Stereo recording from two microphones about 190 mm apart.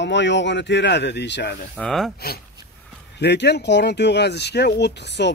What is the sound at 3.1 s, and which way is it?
Speech, 65° left (ahead or behind).